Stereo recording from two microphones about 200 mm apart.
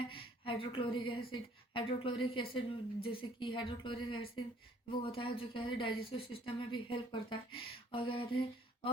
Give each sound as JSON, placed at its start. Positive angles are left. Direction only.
{"t": 0.1, "sound": "a woman's voice", "side_deg": 25}